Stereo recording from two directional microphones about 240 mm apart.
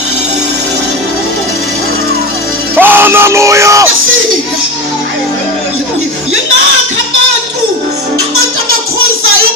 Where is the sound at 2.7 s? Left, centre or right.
Centre.